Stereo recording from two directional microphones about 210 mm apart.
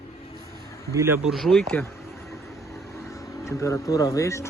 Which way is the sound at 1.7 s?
10° left (ahead or behind).